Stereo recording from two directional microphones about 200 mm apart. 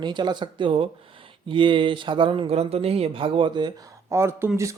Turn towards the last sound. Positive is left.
turn(degrees=-15)  # may be behind; listen again after turning